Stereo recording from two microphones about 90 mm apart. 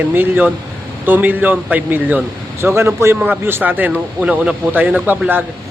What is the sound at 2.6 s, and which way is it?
A man's voice, 30° right (ahead or behind).